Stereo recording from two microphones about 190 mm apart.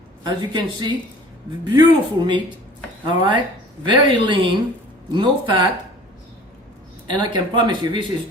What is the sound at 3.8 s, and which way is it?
Speech, 25° right (ahead or behind).